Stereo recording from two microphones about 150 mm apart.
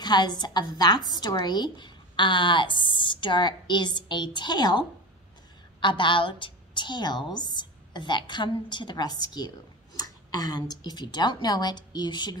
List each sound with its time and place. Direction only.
0.0 s a woman's voice: 30° left (ahead or behind)